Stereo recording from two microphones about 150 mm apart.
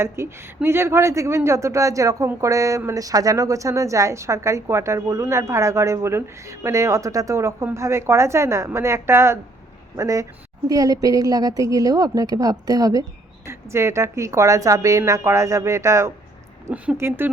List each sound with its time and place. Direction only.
0.0 s a woman's voice: 15° right (ahead or behind)